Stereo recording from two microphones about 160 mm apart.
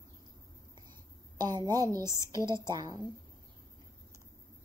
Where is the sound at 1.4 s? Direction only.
25° right (ahead or behind).